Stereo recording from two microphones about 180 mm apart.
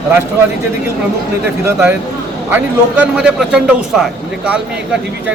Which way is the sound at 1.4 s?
10° right (ahead or behind).